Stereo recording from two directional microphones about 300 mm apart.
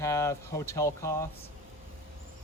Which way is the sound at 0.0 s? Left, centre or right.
Centre.